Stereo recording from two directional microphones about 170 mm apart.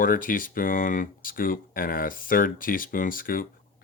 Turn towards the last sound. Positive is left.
turn(degrees=55)  # may be behind; listen again after turning